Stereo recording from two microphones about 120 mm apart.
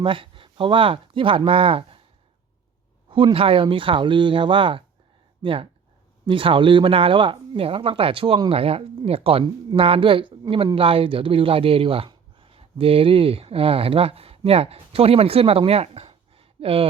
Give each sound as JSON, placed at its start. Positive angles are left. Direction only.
{"t": 0.0, "sound": "speech", "side_deg": -45}
{"t": 3.3, "sound": "speech", "side_deg": -50}